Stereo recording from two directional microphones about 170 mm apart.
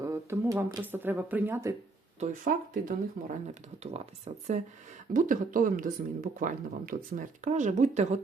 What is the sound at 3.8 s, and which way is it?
Speech, 40° right (ahead or behind).